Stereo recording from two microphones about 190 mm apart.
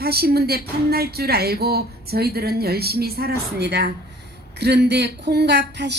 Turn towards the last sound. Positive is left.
turn(degrees=-65)  # may be behind; listen again after turning